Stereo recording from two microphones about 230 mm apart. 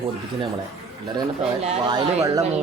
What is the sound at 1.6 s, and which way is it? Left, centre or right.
Speech, right.